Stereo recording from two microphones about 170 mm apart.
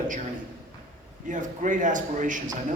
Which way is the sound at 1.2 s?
50° right (ahead or behind).